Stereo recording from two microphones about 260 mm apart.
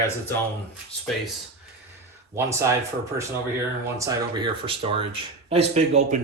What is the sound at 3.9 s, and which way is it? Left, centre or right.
Speech, centre.